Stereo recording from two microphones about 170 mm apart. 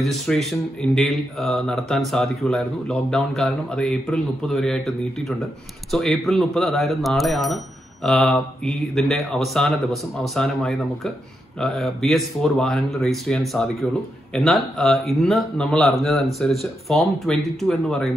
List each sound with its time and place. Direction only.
0.0 s speech: centre (ahead or behind)